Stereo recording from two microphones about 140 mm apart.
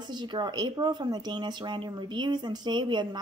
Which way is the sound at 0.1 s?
30° right (ahead or behind).